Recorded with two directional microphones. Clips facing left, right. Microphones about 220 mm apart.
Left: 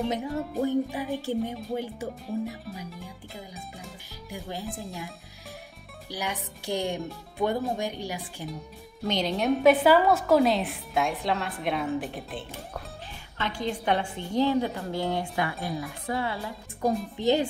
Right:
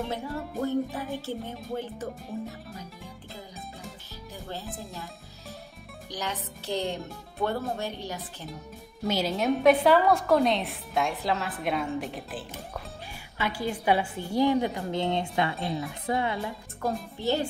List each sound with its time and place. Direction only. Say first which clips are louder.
0.1 s music: left 3 dB; 15° left (ahead or behind)
4.3 s speech: left 3 dB; 15° left (ahead or behind)
4.6 s a woman's voice: left 3 dB; centre (ahead or behind)
6.0 s music: left 1 dB; 10° left (ahead or behind)
7.3 s speech: left 2 dB; 15° left (ahead or behind)
7.7 s music: left 2 dB; 15° left (ahead or behind)
9.0 s a woman's voice: even; 5° right (ahead or behind)
17.2 s music: left 4 dB; 15° left (ahead or behind)